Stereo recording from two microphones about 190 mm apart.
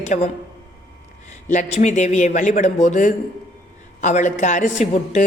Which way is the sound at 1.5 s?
40° left (ahead or behind).